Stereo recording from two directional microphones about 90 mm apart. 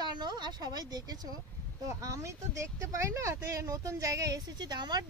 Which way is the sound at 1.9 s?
35° right (ahead or behind).